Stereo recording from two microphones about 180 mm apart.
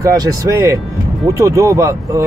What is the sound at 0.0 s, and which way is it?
Speech, 20° right (ahead or behind).